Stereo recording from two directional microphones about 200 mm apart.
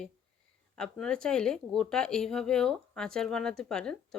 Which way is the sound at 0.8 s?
5° left (ahead or behind).